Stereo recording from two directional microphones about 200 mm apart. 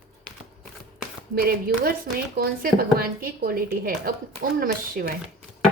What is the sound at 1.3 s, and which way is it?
Speech, 50° right (ahead or behind).